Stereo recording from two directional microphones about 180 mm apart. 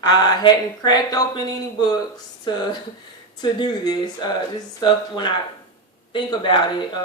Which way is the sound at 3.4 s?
25° left (ahead or behind).